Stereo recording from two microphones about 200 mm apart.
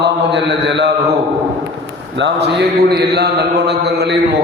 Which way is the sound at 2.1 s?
60° right (ahead or behind).